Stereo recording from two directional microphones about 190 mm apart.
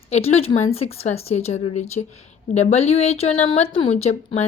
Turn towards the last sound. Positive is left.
turn(degrees=35)  # may be behind; listen again after turning